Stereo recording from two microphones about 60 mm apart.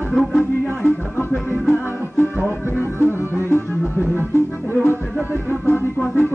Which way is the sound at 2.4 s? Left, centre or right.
Left.